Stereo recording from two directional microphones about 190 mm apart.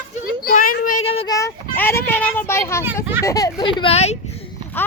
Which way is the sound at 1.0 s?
30° left (ahead or behind).